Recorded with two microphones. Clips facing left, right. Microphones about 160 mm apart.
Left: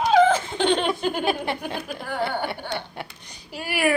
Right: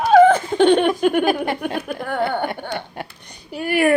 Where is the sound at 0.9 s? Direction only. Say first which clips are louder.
Right 8 dB; 70° right (ahead or behind).